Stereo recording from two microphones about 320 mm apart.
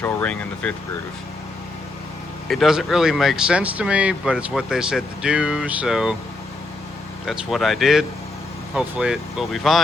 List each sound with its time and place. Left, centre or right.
0.0 s speech: centre
2.5 s speech: centre
7.3 s speech: centre